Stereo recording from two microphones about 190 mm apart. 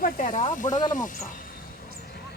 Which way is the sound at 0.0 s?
45° left (ahead or behind).